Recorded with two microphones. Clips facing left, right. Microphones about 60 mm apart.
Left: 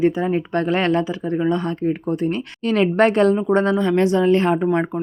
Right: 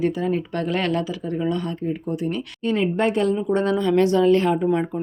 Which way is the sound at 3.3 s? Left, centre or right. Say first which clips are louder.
Left 3 dB; left.